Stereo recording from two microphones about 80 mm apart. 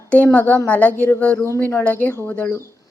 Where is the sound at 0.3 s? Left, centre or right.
Left.